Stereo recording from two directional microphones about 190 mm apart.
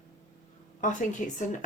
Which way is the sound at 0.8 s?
40° left (ahead or behind).